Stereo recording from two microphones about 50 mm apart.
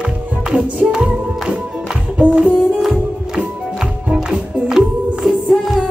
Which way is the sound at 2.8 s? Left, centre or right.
Centre.